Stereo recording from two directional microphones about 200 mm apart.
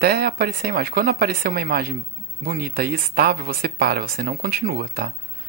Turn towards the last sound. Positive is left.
turn(degrees=-50)  # may be behind; listen again after turning